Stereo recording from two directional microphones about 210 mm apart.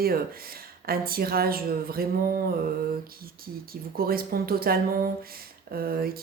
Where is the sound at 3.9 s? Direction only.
45° right (ahead or behind).